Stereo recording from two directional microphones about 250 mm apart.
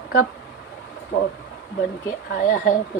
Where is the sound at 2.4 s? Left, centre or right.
Left.